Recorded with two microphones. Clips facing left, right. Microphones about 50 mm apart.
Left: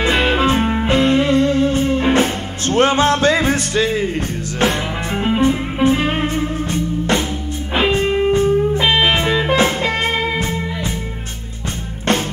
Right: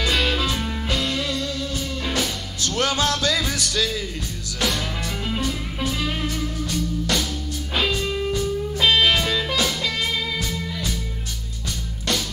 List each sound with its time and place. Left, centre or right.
0.0 s music: left
5.2 s music: left